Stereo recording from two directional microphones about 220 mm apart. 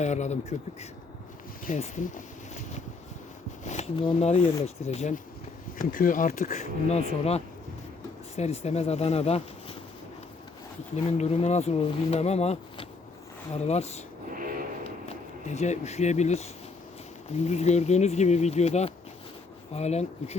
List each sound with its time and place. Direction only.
0.0 s speech: 30° left (ahead or behind)
1.6 s speech: 35° left (ahead or behind)
3.6 s speech: 30° left (ahead or behind)
10.9 s speech: 30° left (ahead or behind)
14.3 s a sound: 40° right (ahead or behind)
15.0 s speech: 30° left (ahead or behind)